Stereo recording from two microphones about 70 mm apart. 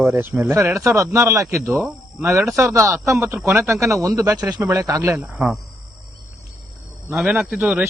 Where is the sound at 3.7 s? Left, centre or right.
Right.